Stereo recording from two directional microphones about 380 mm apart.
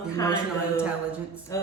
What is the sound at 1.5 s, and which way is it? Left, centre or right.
Speech, centre.